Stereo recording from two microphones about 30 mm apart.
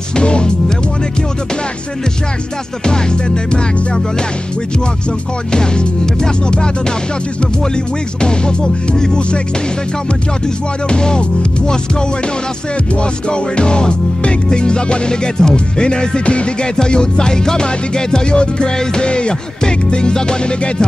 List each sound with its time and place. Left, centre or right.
0.1 s music: left
2.8 s music: left
5.5 s music: left
7.7 s music: left
10.9 s music: left
13.0 s music: left